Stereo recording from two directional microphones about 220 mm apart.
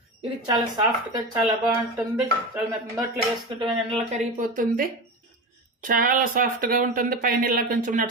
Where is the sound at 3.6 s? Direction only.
30° right (ahead or behind).